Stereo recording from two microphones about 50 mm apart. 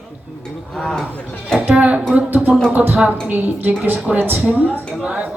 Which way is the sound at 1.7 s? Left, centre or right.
Right.